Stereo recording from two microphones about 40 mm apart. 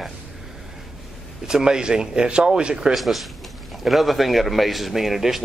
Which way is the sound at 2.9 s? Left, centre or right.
Centre.